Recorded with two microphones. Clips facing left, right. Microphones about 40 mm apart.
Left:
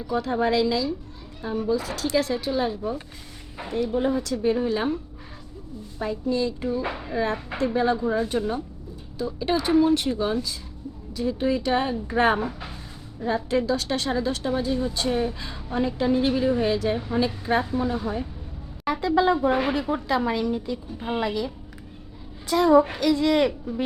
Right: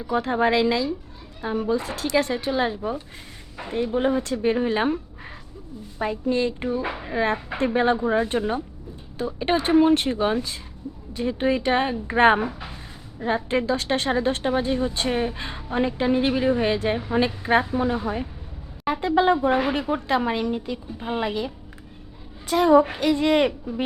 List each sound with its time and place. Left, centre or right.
0.2 s a woman's voice: right
6.0 s a woman's voice: right
7.6 s a woman's voice: right
12.5 s speech: centre
13.1 s a woman's voice: right